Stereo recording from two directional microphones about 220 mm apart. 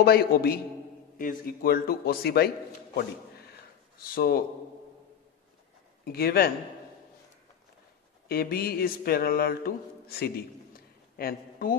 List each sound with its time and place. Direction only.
0.0 s a man's voice: 45° left (ahead or behind)
6.0 s a man's voice: 45° left (ahead or behind)
8.3 s speech: 45° left (ahead or behind)